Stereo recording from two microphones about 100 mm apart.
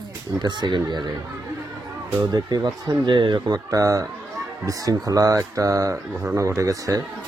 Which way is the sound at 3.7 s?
35° right (ahead or behind).